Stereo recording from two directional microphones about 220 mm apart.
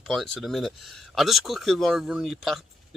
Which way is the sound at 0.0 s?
Centre (ahead or behind).